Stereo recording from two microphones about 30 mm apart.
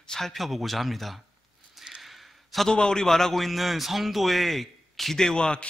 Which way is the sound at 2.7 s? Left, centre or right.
Left.